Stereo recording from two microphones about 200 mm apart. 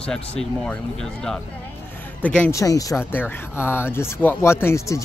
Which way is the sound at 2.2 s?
5° left (ahead or behind).